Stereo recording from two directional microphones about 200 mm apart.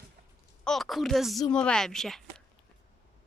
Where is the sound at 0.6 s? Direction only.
Centre (ahead or behind).